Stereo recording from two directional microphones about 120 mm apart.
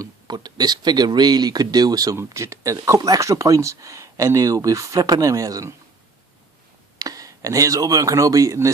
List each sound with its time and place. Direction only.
0.0 s speech: 35° right (ahead or behind)
7.0 s speech: 30° right (ahead or behind)